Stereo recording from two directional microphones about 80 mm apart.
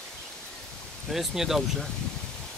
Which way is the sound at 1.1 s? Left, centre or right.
Centre.